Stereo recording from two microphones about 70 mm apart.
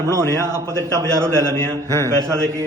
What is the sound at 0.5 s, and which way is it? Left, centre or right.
A man's voice, right.